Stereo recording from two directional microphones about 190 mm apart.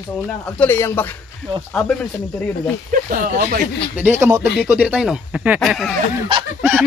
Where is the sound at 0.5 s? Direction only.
10° left (ahead or behind).